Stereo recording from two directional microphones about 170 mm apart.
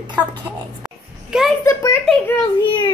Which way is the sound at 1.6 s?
15° left (ahead or behind).